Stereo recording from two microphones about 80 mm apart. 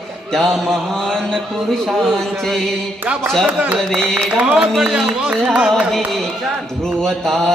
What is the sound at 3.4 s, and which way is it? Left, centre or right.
Speech, centre.